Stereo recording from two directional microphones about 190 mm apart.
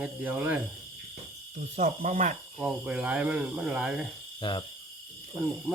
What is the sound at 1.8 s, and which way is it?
Speech, 40° right (ahead or behind).